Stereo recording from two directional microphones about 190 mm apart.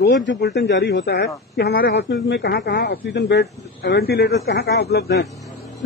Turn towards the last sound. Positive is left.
turn(degrees=60)  # may be behind; listen again after turning